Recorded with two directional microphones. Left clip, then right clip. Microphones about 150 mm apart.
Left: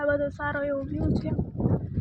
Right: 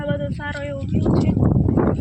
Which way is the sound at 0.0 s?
35° left (ahead or behind).